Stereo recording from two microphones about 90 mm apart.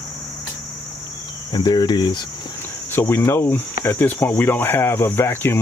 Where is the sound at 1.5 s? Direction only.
55° left (ahead or behind).